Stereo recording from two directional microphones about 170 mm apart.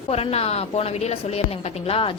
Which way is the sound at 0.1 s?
35° left (ahead or behind).